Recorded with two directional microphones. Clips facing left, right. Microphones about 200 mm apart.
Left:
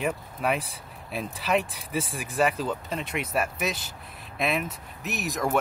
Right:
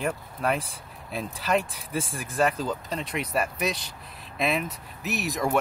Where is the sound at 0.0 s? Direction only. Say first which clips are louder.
Even; 5° left (ahead or behind).